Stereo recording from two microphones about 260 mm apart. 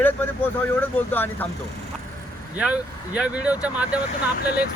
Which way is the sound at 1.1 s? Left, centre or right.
Centre.